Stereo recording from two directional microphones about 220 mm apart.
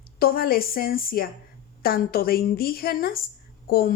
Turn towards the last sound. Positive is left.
turn(degrees=45)  # may be behind; listen again after turning